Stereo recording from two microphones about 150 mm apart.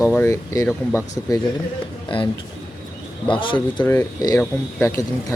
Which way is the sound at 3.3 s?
35° left (ahead or behind).